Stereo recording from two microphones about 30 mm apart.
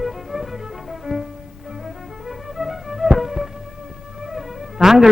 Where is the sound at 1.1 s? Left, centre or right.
Right.